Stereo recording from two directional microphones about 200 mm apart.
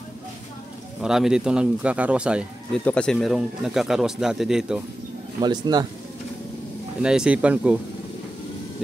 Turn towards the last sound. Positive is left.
turn(degrees=-5)  # may be behind; listen again after turning